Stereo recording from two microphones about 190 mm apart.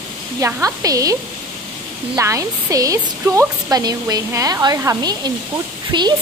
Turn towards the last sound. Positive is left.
turn(degrees=-25)  # may be behind; listen again after turning